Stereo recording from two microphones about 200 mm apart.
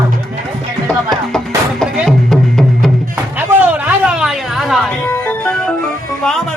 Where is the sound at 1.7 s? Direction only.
Centre (ahead or behind).